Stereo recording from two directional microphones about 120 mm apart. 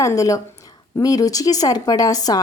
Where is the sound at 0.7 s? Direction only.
30° left (ahead or behind).